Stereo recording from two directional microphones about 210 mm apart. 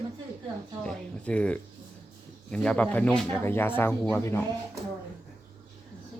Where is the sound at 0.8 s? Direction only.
5° left (ahead or behind).